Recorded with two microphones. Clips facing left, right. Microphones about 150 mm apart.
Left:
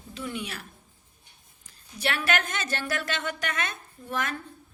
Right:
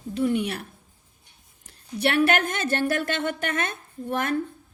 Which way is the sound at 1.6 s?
60° right (ahead or behind).